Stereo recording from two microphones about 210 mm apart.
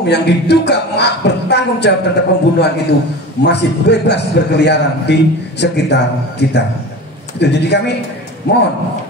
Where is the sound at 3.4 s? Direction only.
55° left (ahead or behind).